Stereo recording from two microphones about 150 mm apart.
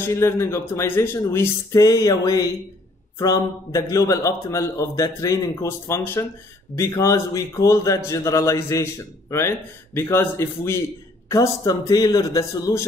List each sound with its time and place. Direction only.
0.0 s a man's voice: 15° left (ahead or behind)